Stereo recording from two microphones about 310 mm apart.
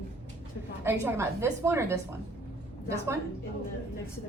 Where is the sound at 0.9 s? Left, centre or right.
Centre.